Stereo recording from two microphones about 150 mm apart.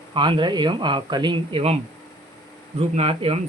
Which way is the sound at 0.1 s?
35° right (ahead or behind).